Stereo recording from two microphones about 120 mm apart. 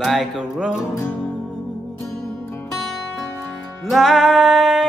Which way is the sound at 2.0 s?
20° left (ahead or behind).